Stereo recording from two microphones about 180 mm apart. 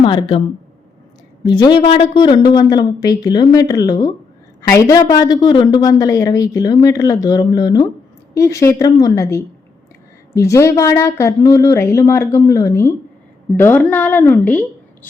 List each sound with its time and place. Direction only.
0.0 s speech: 25° left (ahead or behind)
1.5 s a woman's voice: 25° left (ahead or behind)